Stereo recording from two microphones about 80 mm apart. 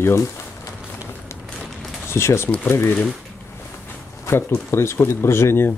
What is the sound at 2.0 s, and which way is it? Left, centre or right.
Speech, left.